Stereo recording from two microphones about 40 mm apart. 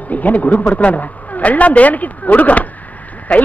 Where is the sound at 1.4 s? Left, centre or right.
Left.